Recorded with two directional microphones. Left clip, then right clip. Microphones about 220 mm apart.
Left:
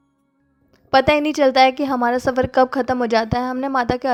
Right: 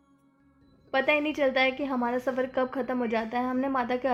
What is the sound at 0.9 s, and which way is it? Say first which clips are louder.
A woman's voice: left 10 dB; 50° left (ahead or behind).